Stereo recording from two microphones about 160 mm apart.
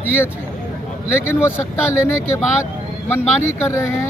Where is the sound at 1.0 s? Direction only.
15° left (ahead or behind).